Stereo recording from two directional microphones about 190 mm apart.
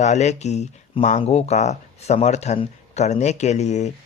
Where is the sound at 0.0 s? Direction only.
35° left (ahead or behind).